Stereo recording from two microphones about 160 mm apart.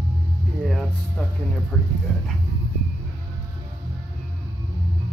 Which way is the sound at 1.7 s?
10° left (ahead or behind).